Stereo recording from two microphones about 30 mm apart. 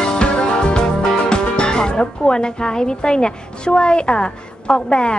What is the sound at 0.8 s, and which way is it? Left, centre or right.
Speech, left.